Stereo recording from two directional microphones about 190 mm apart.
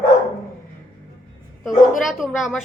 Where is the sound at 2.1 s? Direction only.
Centre (ahead or behind).